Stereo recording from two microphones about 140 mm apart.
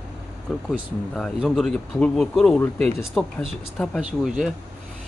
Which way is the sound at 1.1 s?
Centre (ahead or behind).